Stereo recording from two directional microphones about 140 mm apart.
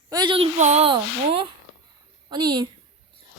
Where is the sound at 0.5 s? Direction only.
55° right (ahead or behind).